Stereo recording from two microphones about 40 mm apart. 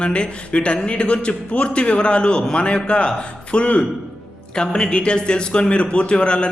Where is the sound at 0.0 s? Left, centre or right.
Left.